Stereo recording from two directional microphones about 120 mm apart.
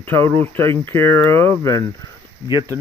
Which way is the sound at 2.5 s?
30° right (ahead or behind).